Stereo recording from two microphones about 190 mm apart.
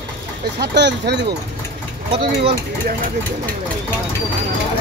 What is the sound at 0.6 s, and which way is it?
Speech, 60° right (ahead or behind).